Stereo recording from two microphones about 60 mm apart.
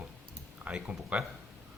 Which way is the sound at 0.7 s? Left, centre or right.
Right.